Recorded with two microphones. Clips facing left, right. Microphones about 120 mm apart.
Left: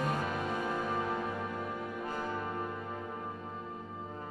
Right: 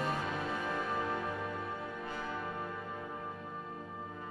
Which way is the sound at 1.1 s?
25° left (ahead or behind).